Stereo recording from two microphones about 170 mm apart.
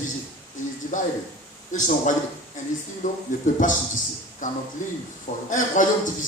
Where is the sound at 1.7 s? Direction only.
50° left (ahead or behind).